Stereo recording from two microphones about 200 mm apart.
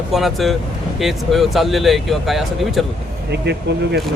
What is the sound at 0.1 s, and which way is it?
Speech, centre (ahead or behind).